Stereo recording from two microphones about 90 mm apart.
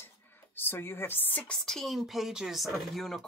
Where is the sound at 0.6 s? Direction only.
25° left (ahead or behind).